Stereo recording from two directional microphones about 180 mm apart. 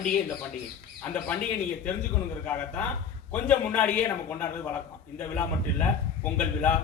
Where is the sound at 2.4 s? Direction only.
10° left (ahead or behind).